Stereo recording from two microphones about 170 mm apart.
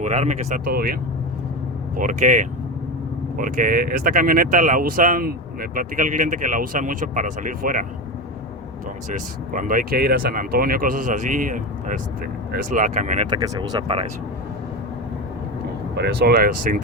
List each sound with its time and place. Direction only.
0.0 s speech: 45° right (ahead or behind); by 0.9 s 60° right (ahead or behind)
2.0 s speech: 50° right (ahead or behind)
9.0 s speech: 50° right (ahead or behind)
13.3 s speech: 25° right (ahead or behind)
16.0 s speech: 70° right (ahead or behind); by 16.8 s 55° right (ahead or behind)